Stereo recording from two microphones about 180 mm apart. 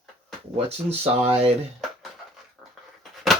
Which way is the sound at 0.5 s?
35° right (ahead or behind).